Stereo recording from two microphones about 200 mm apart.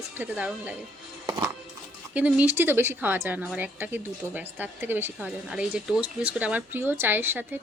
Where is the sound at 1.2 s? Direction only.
20° right (ahead or behind).